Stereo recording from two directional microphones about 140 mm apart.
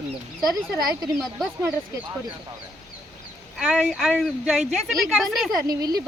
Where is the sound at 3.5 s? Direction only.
5° right (ahead or behind).